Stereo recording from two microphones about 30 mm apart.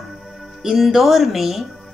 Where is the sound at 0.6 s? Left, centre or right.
Right.